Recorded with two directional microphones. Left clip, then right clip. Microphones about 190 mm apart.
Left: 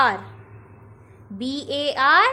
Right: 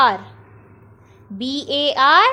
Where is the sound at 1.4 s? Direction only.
20° right (ahead or behind).